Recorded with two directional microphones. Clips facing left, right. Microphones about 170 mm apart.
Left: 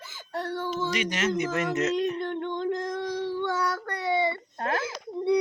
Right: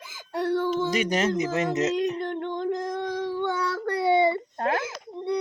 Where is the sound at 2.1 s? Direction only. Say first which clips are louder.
Right 1 dB; 10° right (ahead or behind).